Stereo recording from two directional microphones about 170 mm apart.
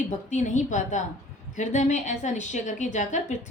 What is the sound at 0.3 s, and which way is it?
A woman's voice, 45° left (ahead or behind).